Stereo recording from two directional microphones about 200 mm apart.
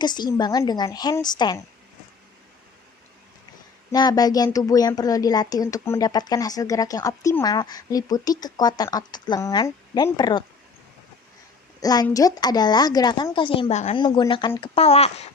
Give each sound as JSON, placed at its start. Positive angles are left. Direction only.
{"t": 0.0, "sound": "speech", "side_deg": 20}
{"t": 3.9, "sound": "speech", "side_deg": 20}
{"t": 11.8, "sound": "a woman's voice", "side_deg": 20}